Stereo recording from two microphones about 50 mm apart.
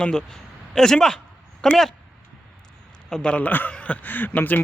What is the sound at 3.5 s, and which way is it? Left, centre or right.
A man's voice, left.